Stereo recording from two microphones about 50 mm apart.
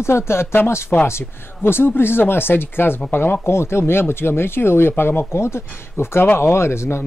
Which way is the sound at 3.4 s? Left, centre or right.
Left.